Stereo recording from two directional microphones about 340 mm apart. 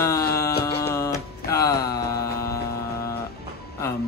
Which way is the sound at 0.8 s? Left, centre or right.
Centre.